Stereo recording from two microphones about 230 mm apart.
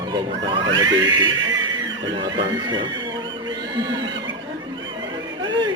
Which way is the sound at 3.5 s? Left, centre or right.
Centre.